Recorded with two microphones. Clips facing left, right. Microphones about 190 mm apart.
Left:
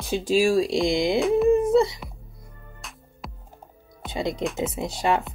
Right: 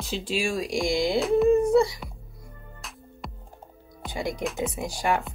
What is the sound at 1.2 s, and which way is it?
Speech, centre (ahead or behind).